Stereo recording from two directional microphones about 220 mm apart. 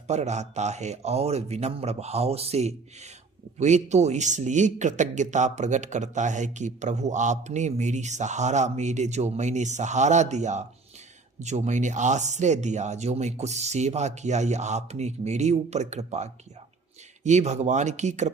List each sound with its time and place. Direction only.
0.1 s a man's voice: 30° right (ahead or behind)